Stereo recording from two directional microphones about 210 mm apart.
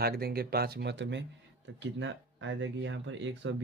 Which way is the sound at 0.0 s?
45° right (ahead or behind).